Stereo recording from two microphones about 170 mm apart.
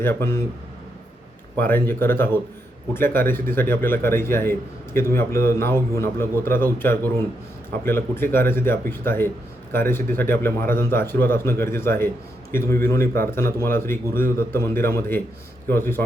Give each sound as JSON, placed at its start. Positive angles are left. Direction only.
{"t": 0.0, "sound": "speech", "side_deg": 15}
{"t": 1.5, "sound": "speech", "side_deg": 10}